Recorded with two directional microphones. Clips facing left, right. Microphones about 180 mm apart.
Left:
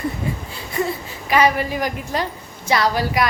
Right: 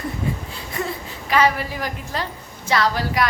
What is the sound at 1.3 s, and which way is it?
A woman's voice, 15° left (ahead or behind).